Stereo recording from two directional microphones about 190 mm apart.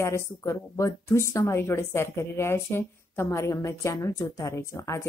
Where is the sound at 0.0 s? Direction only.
15° left (ahead or behind).